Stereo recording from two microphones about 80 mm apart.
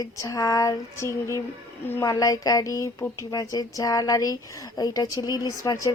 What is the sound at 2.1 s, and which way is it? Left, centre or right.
Speech, left.